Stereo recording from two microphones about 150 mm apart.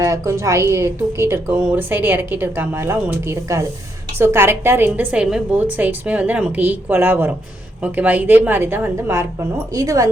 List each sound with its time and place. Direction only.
0.0 s a woman's voice: 20° right (ahead or behind)